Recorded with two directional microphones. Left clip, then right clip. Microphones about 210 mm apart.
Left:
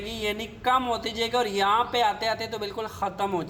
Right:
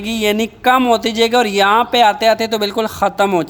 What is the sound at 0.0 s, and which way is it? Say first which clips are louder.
Speech: right 13 dB; 50° right (ahead or behind).